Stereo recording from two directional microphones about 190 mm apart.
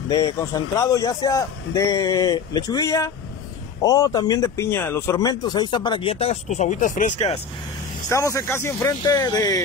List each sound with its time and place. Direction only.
0.1 s speech: 20° left (ahead or behind); by 7.3 s 40° left (ahead or behind)
8.1 s speech: 15° left (ahead or behind)